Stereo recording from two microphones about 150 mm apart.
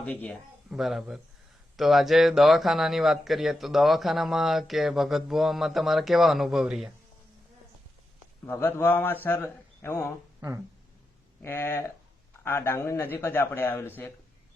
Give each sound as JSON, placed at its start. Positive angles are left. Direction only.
{"t": 0.0, "sound": "a man's voice", "side_deg": 10}
{"t": 0.7, "sound": "speech", "side_deg": 0}
{"t": 8.4, "sound": "a man's voice", "side_deg": 15}
{"t": 11.4, "sound": "a man's voice", "side_deg": 15}